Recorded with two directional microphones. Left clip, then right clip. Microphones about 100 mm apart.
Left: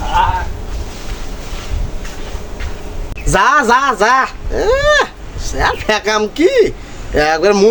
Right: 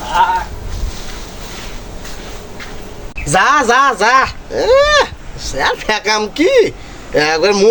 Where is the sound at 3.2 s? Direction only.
35° left (ahead or behind).